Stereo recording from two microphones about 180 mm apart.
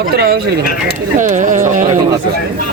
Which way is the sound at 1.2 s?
45° right (ahead or behind).